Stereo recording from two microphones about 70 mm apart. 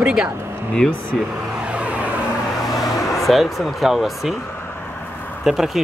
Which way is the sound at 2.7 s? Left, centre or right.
Left.